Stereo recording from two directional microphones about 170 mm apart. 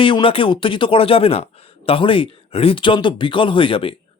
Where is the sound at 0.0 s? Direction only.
30° left (ahead or behind).